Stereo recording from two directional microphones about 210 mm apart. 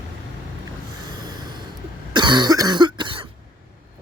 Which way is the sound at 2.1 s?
20° right (ahead or behind).